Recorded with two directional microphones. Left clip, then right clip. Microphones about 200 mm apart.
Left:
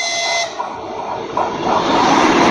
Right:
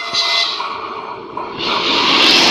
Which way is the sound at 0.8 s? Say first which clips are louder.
Left 2 dB; 45° left (ahead or behind).